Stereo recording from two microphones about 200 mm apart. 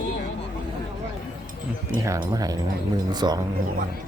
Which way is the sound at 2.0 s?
15° right (ahead or behind).